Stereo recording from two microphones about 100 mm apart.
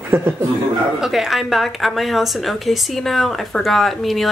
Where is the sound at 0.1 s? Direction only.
20° right (ahead or behind).